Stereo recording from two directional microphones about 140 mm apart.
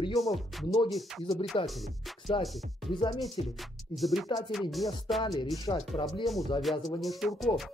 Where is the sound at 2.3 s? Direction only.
45° left (ahead or behind).